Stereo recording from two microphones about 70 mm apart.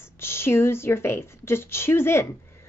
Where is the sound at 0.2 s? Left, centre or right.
Left.